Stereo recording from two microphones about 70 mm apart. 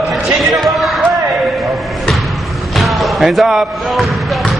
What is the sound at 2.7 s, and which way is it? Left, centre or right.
Basketball bounce, centre.